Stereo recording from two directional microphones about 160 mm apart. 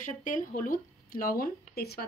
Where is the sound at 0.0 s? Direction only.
55° left (ahead or behind).